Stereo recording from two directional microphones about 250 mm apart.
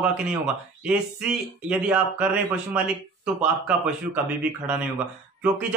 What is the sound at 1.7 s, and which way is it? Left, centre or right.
Speech, centre.